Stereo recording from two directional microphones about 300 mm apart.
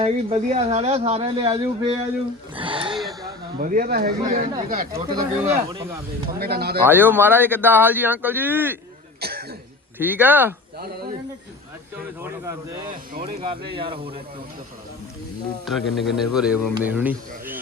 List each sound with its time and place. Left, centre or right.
0.0 s speech: centre
2.6 s a sound: centre
3.6 s speech: right
4.9 s speech: centre
6.4 s speech: right
6.8 s speech: centre
9.2 s cough: right
10.0 s speech: centre
10.8 s speech: right
12.2 s speech: centre
15.6 s a man's voice: centre